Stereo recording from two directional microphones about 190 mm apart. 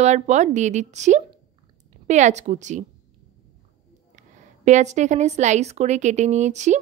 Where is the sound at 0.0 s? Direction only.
35° right (ahead or behind).